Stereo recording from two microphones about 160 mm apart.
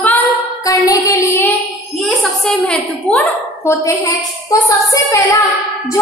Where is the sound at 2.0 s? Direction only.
5° left (ahead or behind).